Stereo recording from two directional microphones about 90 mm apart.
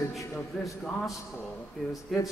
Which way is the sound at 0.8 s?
15° left (ahead or behind).